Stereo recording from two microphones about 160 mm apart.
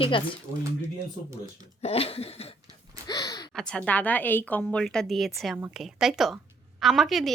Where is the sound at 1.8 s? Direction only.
40° left (ahead or behind).